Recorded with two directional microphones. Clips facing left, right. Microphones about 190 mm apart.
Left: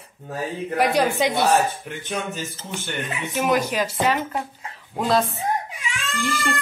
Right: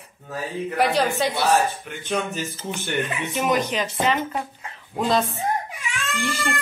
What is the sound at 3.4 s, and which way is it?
Speech, 5° left (ahead or behind).